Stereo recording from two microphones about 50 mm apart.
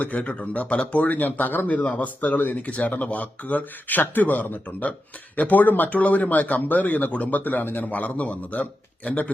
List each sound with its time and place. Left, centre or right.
0.0 s speech: left
7.9 s speech: left